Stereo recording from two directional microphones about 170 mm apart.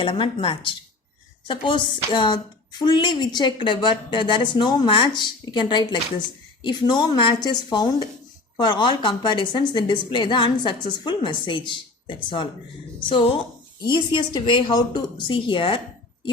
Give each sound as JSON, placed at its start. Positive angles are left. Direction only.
{"t": 0.0, "sound": "speech", "side_deg": 30}
{"t": 13.8, "sound": "speech", "side_deg": 25}